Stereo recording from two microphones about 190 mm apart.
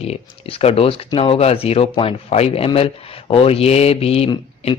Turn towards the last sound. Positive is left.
turn(degrees=30)  # may be behind; listen again after turning